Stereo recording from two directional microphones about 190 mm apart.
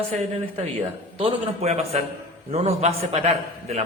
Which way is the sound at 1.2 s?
35° right (ahead or behind).